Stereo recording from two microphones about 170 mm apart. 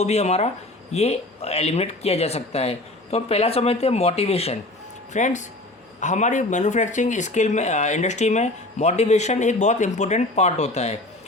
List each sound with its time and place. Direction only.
0.0 s speech: 40° left (ahead or behind)